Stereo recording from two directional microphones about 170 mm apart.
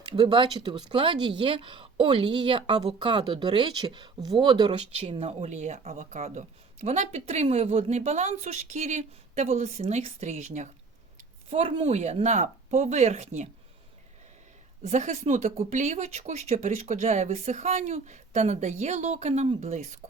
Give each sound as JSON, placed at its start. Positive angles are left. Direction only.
{"t": 0.0, "sound": "speech", "side_deg": -30}
{"t": 5.1, "sound": "speech", "side_deg": -40}
{"t": 14.8, "sound": "speech", "side_deg": -45}